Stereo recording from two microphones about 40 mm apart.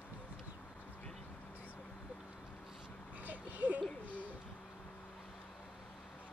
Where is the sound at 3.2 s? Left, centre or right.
Right.